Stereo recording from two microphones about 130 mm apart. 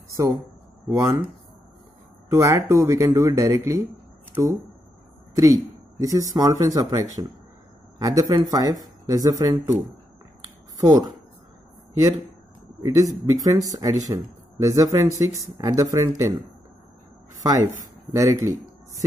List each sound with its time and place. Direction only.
0.1 s speech: 25° right (ahead or behind)
2.2 s speech: 25° right (ahead or behind)
10.8 s speech: 25° right (ahead or behind)
12.8 s speech: 25° right (ahead or behind)
17.4 s speech: 25° right (ahead or behind)